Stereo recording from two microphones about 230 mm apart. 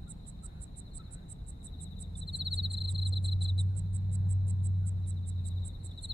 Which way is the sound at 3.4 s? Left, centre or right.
Right.